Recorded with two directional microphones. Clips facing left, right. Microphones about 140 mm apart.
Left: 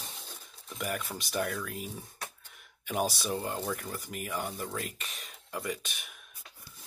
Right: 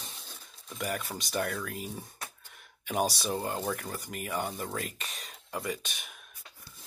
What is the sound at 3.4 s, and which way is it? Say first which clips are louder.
Speech: right 2 dB; 5° right (ahead or behind).